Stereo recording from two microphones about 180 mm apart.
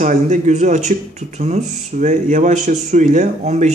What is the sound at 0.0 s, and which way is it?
Speech, 45° right (ahead or behind).